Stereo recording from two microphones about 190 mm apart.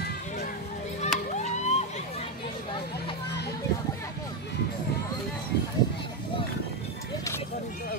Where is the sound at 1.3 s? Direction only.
35° left (ahead or behind).